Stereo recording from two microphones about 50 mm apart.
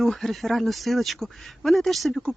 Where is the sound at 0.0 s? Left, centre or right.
Centre.